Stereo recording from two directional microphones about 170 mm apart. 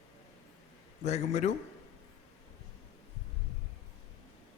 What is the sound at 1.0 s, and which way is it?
Speech, 40° left (ahead or behind).